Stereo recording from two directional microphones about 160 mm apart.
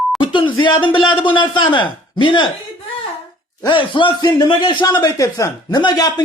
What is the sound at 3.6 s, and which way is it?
A man's voice, 30° left (ahead or behind).